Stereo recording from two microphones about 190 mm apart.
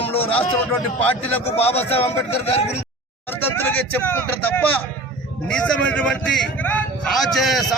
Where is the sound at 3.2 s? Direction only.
10° left (ahead or behind).